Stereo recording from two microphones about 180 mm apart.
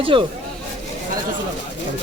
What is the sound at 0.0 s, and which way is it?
Speech, 30° right (ahead or behind).